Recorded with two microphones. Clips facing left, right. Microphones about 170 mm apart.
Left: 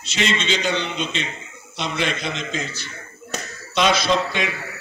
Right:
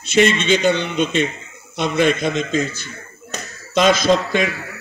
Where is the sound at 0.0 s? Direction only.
55° right (ahead or behind).